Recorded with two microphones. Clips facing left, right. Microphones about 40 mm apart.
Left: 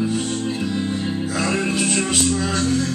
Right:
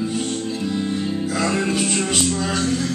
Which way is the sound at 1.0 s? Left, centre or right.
Centre.